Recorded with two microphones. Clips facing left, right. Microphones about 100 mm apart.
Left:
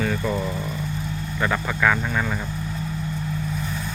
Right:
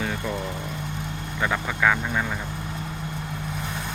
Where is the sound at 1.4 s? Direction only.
5° right (ahead or behind).